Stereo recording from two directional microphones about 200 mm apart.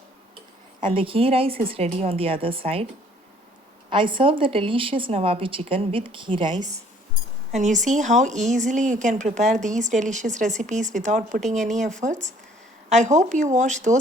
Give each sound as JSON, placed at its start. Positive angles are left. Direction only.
{"t": 0.8, "sound": "speech", "side_deg": -25}
{"t": 3.8, "sound": "speech", "side_deg": -25}
{"t": 7.5, "sound": "speech", "side_deg": -35}